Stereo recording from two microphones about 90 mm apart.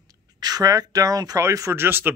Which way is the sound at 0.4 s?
45° right (ahead or behind).